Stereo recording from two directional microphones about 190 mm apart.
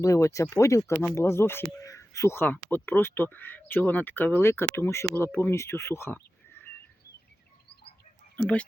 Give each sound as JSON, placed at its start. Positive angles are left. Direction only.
{"t": 0.0, "sound": "speech", "side_deg": 15}
{"t": 8.4, "sound": "speech", "side_deg": 5}